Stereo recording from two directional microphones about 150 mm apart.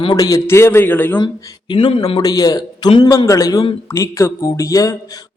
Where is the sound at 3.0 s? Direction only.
20° left (ahead or behind).